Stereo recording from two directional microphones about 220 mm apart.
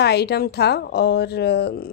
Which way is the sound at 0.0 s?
45° left (ahead or behind).